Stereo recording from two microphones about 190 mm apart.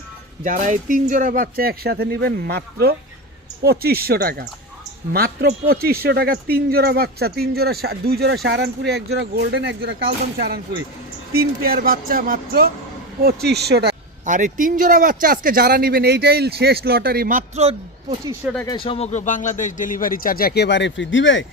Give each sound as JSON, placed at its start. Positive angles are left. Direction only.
{"t": 0.4, "sound": "a man's voice", "side_deg": -40}
{"t": 11.3, "sound": "a man's voice", "side_deg": -50}
{"t": 18.4, "sound": "speech", "side_deg": -5}
{"t": 18.8, "sound": "a man's voice", "side_deg": 30}